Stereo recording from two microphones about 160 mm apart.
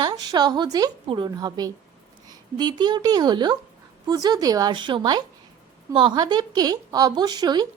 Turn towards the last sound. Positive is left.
turn(degrees=-25)  # may be behind; listen again after turning